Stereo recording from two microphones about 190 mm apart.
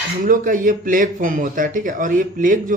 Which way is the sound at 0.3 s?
45° right (ahead or behind).